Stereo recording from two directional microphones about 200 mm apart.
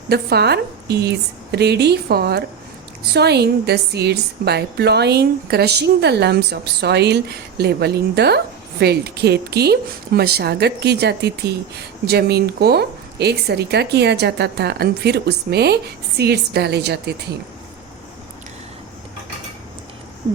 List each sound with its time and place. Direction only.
0.1 s a woman's voice: 55° right (ahead or behind)